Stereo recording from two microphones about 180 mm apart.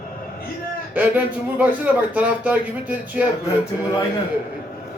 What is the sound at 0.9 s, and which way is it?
A man's voice, 10° right (ahead or behind).